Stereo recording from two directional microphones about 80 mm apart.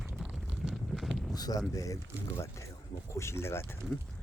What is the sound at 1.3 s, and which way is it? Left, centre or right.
Speech, left.